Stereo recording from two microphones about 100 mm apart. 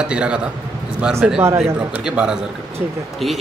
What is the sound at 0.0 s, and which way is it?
A man's voice, 10° right (ahead or behind).